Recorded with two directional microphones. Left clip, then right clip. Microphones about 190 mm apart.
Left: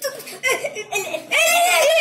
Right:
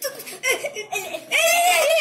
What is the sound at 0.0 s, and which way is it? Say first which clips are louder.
Laughter: left 3 dB; 20° right (ahead or behind).